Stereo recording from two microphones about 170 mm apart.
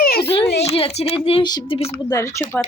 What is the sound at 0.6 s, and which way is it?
Speech, 35° left (ahead or behind).